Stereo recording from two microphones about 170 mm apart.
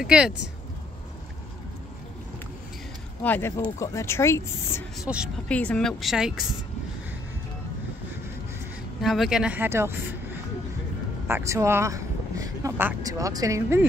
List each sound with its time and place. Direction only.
0.0 s speech: 5° right (ahead or behind)
3.3 s speech: 15° left (ahead or behind)
4.9 s speech: 5° right (ahead or behind)
5.5 s speech: 5° left (ahead or behind)
9.0 s speech: centre (ahead or behind)
11.2 s speech: 15° right (ahead or behind)